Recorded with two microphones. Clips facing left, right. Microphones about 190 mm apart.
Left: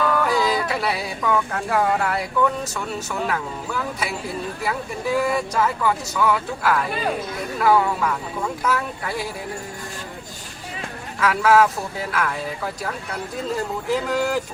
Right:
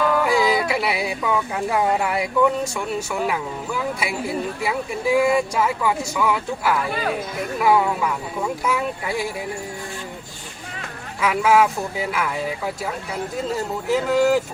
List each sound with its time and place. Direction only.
0.2 s yodeling: 10° right (ahead or behind)
0.7 s speech: 10° right (ahead or behind)
11.2 s speech: 10° right (ahead or behind)